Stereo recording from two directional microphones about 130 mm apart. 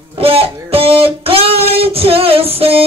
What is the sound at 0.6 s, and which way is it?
Music, 45° right (ahead or behind).